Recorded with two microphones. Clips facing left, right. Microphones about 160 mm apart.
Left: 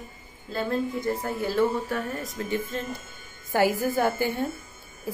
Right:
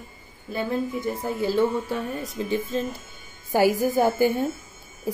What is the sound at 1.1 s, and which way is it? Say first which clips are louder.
Speech: right 2 dB; 15° right (ahead or behind).